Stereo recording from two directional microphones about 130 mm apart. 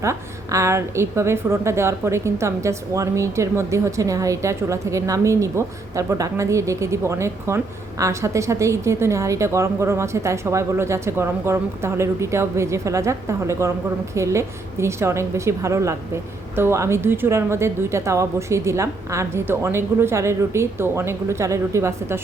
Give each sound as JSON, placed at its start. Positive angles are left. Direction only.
{"t": 0.0, "sound": "a woman's voice", "side_deg": -20}